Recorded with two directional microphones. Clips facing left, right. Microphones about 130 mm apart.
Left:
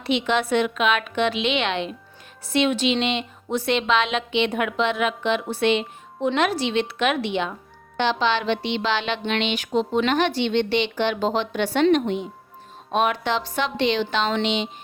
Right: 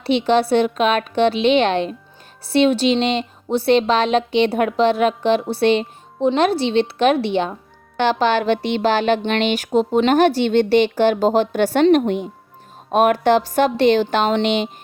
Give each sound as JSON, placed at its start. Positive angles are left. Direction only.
{"t": 0.0, "sound": "speech", "side_deg": -35}
{"t": 7.9, "sound": "a woman's voice", "side_deg": -50}